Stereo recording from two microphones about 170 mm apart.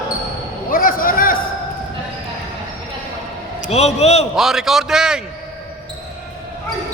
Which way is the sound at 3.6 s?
40° left (ahead or behind).